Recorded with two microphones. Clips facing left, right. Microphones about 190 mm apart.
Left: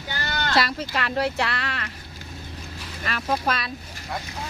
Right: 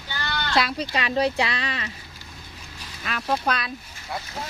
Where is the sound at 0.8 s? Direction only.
15° right (ahead or behind).